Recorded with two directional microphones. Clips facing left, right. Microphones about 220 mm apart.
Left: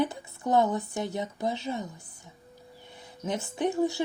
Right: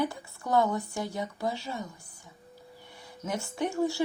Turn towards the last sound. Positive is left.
turn(degrees=20)  # may be behind; listen again after turning